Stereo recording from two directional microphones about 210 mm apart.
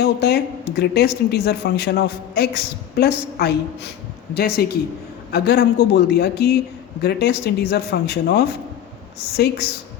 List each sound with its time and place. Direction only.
0.0 s speech: 50° left (ahead or behind)